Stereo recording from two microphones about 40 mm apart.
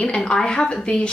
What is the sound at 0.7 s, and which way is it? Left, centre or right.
Speech, centre.